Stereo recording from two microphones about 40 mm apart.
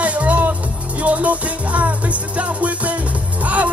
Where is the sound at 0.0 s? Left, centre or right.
Right.